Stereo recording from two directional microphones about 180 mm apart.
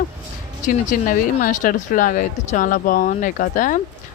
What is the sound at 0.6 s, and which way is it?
Speech, 45° left (ahead or behind).